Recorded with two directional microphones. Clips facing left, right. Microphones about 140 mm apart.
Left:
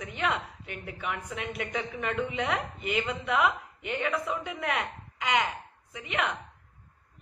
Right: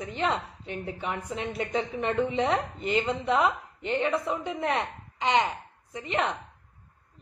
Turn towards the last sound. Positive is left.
turn(degrees=-30)  # may be behind; listen again after turning